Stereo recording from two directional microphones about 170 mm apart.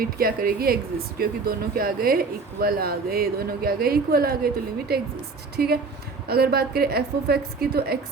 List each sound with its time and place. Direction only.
0.0 s a woman's voice: 60° right (ahead or behind)